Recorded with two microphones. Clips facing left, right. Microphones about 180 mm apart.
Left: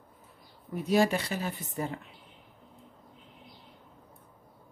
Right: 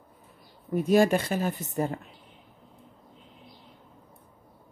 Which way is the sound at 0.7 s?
50° right (ahead or behind).